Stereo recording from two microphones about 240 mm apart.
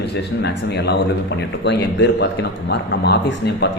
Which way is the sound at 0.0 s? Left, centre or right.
Left.